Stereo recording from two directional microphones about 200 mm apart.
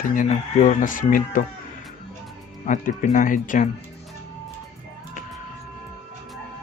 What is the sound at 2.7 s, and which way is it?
Speech, 40° left (ahead or behind).